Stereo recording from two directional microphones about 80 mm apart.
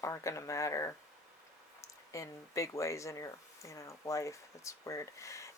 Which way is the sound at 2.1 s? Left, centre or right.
Left.